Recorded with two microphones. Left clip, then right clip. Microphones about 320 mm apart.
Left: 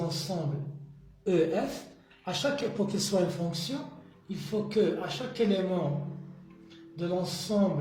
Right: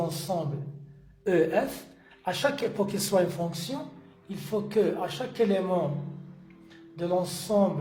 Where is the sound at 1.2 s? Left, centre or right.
Right.